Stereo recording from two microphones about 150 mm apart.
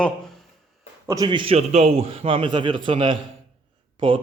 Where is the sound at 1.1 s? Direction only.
25° right (ahead or behind).